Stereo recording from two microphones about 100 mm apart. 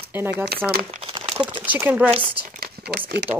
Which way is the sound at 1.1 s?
55° right (ahead or behind).